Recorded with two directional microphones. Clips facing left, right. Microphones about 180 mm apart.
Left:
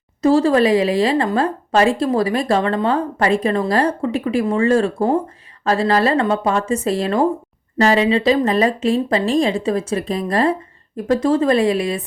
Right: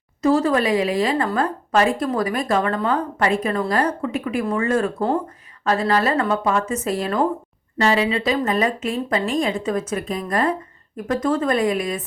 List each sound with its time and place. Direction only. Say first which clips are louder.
0.2 s speech: left 4 dB; 30° left (ahead or behind)